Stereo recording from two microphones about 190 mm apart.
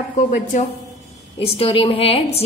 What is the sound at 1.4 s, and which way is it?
A woman's voice, 30° left (ahead or behind).